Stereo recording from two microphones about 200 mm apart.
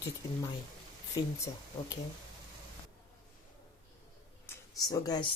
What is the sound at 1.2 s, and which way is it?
Speech, 20° left (ahead or behind).